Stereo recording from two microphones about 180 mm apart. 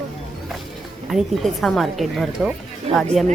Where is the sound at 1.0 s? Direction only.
Centre (ahead or behind).